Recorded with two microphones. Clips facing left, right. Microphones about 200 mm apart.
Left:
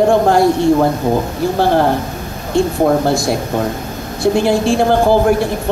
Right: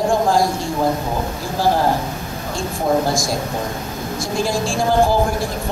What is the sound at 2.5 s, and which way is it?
Speech, 65° left (ahead or behind).